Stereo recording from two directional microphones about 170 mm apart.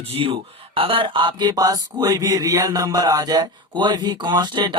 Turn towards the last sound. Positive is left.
turn(degrees=-25)  # may be behind; listen again after turning